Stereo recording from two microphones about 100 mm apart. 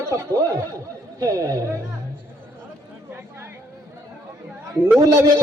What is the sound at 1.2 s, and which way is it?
Speech, 35° right (ahead or behind).